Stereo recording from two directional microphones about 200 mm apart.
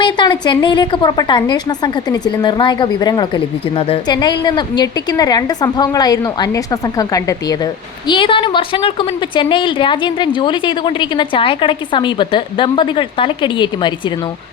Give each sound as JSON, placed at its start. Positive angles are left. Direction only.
{"t": 0.0, "sound": "a woman's voice", "side_deg": 20}